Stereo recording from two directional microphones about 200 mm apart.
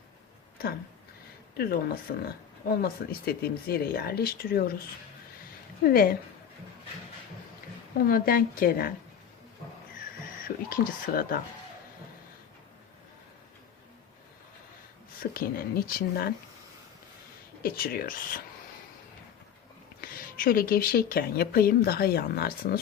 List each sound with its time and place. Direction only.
1.5 s speech: 50° left (ahead or behind)
5.8 s speech: 45° left (ahead or behind)
7.9 s speech: 45° left (ahead or behind)
10.7 s speech: 45° left (ahead or behind)
15.2 s speech: 45° left (ahead or behind)
17.6 s speech: 50° left (ahead or behind)
20.0 s speech: 45° left (ahead or behind)